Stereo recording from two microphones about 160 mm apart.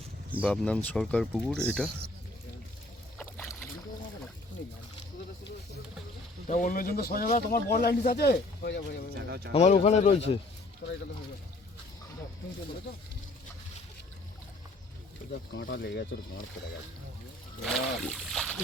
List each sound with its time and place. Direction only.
0.4 s speech: 5° left (ahead or behind)
6.5 s speech: 55° left (ahead or behind); by 9.0 s 90° left
9.1 s speech: 90° right
9.5 s speech: 40° left (ahead or behind)
10.8 s speech: 90° left
15.3 s speech: 85° left
17.6 s speech: centre (ahead or behind)